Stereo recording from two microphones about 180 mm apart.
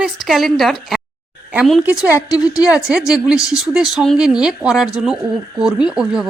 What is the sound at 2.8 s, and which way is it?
Speech, 5° right (ahead or behind).